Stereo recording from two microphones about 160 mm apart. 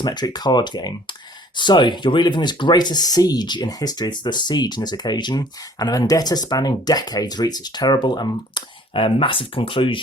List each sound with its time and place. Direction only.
0.0 s speech: 25° left (ahead or behind)